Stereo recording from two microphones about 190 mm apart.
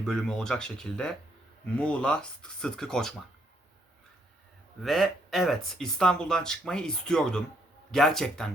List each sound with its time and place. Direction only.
0.0 s speech: centre (ahead or behind)
4.8 s speech: centre (ahead or behind)